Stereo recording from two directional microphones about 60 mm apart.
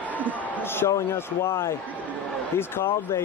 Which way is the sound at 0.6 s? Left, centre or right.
Left.